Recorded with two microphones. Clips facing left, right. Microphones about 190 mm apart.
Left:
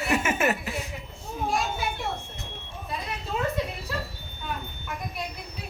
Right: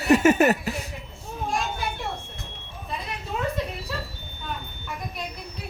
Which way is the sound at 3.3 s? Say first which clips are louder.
Even; 5° left (ahead or behind).